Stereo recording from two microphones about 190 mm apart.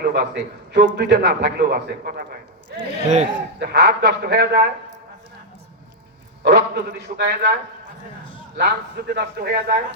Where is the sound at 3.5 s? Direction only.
60° right (ahead or behind).